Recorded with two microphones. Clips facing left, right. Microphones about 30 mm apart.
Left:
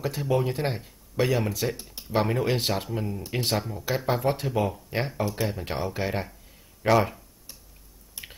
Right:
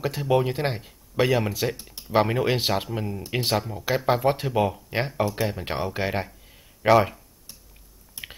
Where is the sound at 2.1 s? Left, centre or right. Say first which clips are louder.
Right 3 dB; right.